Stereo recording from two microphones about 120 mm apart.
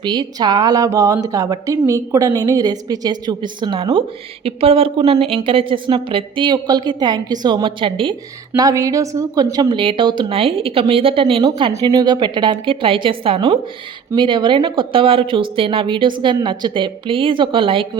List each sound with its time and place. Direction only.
0.0 s a woman's voice: 40° right (ahead or behind)
8.5 s a woman's voice: 30° right (ahead or behind)
9.7 s a woman's voice: 45° right (ahead or behind)
11.7 s a woman's voice: 30° right (ahead or behind)